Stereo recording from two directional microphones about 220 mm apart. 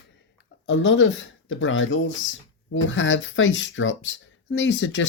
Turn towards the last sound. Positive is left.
turn(degrees=60)  # may be behind; listen again after turning